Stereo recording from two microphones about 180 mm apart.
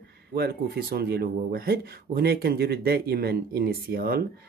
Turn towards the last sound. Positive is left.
turn(degrees=-55)  # may be behind; listen again after turning